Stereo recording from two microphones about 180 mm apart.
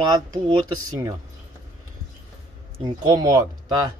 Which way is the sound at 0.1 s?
20° right (ahead or behind).